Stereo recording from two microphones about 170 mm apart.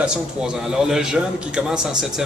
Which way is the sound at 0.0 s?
5° right (ahead or behind).